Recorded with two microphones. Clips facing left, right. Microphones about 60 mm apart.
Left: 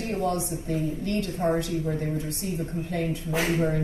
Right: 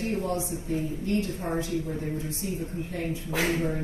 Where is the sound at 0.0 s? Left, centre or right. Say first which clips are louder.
Left 2 dB; left.